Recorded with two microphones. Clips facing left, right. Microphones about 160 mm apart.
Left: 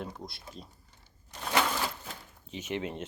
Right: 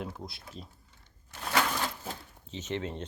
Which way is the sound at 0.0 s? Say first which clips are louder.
Right 1 dB; centre (ahead or behind).